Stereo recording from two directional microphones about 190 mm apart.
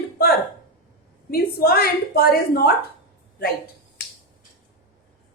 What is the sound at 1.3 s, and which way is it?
A woman's voice, 50° left (ahead or behind).